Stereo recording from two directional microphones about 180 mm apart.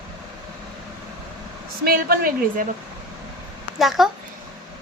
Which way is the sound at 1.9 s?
55° right (ahead or behind).